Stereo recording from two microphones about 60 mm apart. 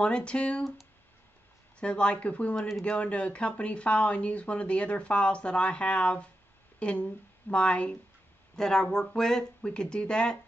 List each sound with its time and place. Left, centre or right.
0.0 s speech: centre
1.8 s speech: centre